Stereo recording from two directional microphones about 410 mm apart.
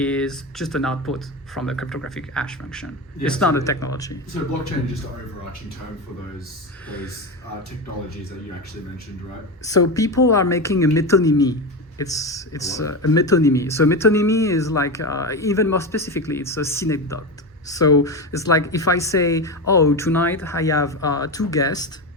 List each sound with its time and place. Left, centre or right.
0.0 s speech: centre
9.9 s speech: centre
12.9 s speech: left
13.1 s speech: centre